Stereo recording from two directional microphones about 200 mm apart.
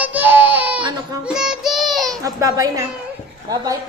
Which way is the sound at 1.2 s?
5° right (ahead or behind).